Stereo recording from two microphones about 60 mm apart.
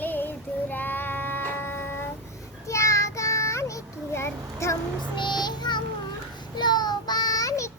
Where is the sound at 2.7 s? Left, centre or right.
Left.